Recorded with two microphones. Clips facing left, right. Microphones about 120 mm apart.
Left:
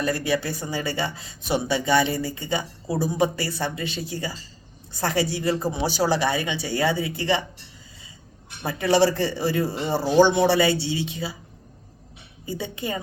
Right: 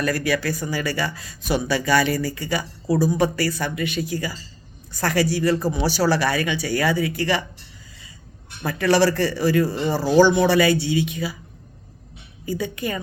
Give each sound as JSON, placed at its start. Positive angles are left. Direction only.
{"t": 0.0, "sound": "speech", "side_deg": 25}
{"t": 8.6, "sound": "speech", "side_deg": 20}
{"t": 12.5, "sound": "speech", "side_deg": 25}